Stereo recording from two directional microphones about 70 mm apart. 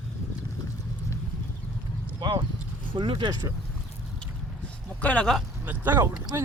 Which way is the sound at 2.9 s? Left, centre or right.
Right.